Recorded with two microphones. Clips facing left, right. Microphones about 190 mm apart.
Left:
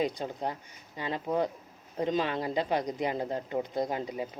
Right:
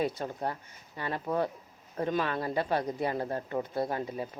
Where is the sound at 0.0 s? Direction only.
15° left (ahead or behind).